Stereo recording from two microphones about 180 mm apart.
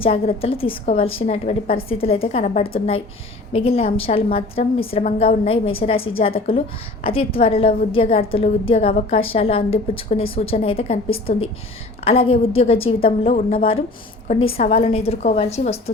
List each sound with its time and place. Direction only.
0.0 s a woman's voice: 35° left (ahead or behind)